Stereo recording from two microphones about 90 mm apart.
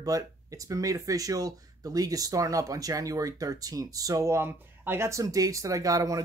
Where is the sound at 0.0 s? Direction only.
40° right (ahead or behind).